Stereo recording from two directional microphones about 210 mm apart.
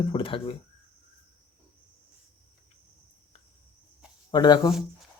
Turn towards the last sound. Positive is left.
turn(degrees=20)  # may be behind; listen again after turning